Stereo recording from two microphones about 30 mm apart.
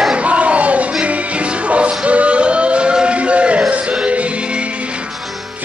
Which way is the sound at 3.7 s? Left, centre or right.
Right.